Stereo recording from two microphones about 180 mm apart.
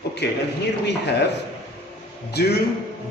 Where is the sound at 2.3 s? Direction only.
65° left (ahead or behind).